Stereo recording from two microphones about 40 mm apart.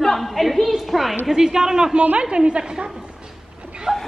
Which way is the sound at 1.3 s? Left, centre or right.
Centre.